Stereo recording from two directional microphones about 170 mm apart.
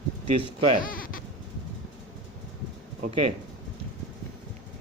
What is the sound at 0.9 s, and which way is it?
Sheep, 55° left (ahead or behind).